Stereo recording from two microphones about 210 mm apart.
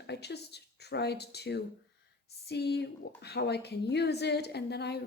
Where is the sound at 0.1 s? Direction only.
50° left (ahead or behind).